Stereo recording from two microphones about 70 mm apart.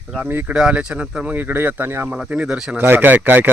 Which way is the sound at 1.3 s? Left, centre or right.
Right.